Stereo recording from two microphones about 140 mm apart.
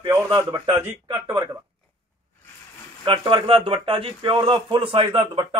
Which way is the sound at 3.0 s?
40° right (ahead or behind).